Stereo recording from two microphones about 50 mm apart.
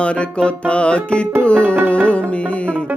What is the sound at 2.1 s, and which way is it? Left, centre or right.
Mantra, left.